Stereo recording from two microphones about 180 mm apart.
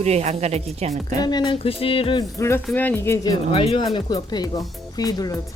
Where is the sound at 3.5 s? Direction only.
30° left (ahead or behind).